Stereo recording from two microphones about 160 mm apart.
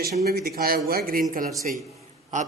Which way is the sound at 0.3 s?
70° right (ahead or behind).